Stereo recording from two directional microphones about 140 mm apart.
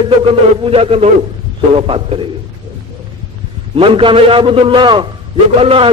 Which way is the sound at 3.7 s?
40° right (ahead or behind).